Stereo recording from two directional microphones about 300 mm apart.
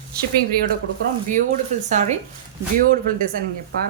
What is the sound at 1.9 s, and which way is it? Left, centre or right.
A woman's voice, right.